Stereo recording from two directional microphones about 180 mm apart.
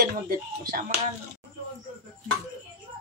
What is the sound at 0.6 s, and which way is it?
Speech, 50° right (ahead or behind).